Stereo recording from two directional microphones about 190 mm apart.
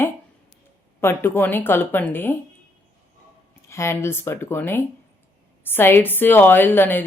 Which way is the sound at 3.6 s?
15° left (ahead or behind).